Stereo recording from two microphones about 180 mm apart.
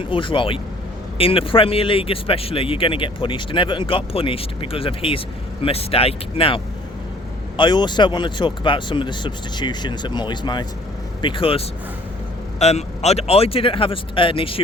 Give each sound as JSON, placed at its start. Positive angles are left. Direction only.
{"t": 0.0, "sound": "speech", "side_deg": 30}